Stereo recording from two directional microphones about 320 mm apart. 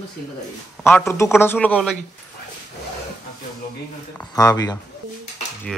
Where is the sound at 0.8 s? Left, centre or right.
Centre.